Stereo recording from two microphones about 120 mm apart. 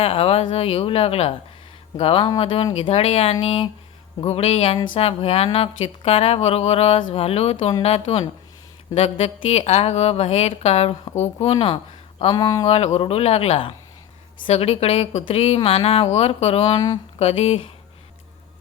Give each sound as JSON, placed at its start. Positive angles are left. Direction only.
{"t": 0.0, "sound": "a woman's voice", "side_deg": 55}
{"t": 2.8, "sound": "a woman's voice", "side_deg": 60}
{"t": 11.5, "sound": "speech", "side_deg": 40}
{"t": 12.6, "sound": "a woman's voice", "side_deg": 60}
{"t": 16.7, "sound": "speech", "side_deg": 35}
{"t": 17.2, "sound": "a woman's voice", "side_deg": 55}